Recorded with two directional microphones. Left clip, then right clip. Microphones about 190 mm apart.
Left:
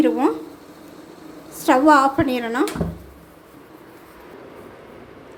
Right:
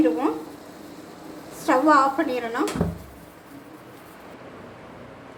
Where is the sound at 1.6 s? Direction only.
30° left (ahead or behind).